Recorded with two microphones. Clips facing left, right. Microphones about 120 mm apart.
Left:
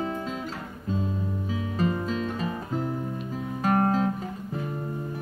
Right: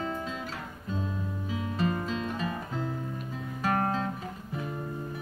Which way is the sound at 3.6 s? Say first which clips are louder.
Left 5 dB; 25° left (ahead or behind).